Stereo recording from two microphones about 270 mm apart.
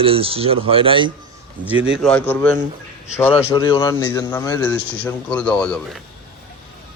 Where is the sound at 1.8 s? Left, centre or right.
Right.